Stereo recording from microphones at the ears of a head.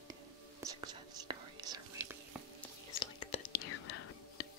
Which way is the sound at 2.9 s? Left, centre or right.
Left.